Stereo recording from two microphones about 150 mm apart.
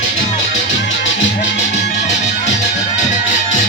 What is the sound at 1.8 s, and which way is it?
Music, 50° left (ahead or behind).